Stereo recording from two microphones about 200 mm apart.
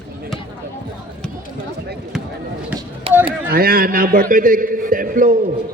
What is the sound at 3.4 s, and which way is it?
A man's voice, 50° right (ahead or behind).